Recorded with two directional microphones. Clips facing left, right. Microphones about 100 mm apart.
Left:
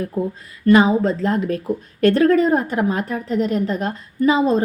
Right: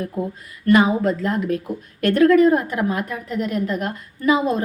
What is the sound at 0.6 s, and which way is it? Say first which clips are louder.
A woman's voice: left 2 dB; 25° left (ahead or behind).